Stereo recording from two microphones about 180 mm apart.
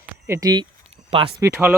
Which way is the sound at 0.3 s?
20° right (ahead or behind).